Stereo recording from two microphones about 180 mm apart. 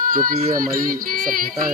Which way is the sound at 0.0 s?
50° right (ahead or behind).